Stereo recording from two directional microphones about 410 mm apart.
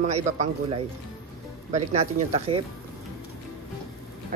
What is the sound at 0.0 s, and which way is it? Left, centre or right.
A woman's voice, centre.